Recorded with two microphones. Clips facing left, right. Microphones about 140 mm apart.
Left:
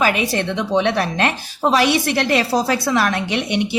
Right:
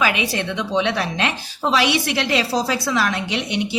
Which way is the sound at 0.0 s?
45° left (ahead or behind).